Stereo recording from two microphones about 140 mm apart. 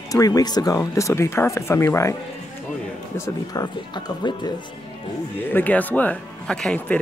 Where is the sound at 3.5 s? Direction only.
30° left (ahead or behind).